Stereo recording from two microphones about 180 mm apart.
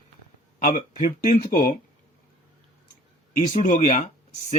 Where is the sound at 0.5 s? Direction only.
50° left (ahead or behind).